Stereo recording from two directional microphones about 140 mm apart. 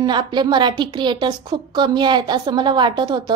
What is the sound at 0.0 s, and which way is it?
A woman's voice, 30° right (ahead or behind).